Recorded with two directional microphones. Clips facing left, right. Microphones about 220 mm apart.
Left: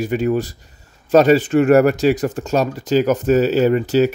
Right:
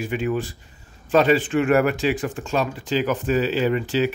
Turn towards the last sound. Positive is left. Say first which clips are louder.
# left 6 dB
turn(degrees=40)  # may be behind; listen again after turning